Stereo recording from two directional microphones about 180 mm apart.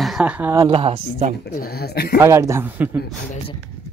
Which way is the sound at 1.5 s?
60° left (ahead or behind).